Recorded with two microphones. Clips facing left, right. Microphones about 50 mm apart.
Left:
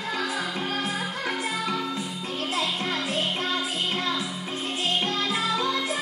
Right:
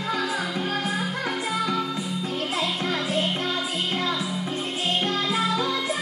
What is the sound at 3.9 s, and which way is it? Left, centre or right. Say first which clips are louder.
Music: right 3 dB; right.